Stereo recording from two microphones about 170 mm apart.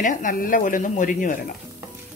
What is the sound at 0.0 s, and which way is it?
Speech, 50° left (ahead or behind).